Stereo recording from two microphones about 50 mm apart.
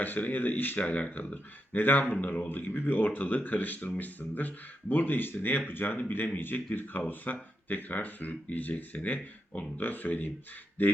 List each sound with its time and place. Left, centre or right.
0.0 s speech: left
0.8 s speech: left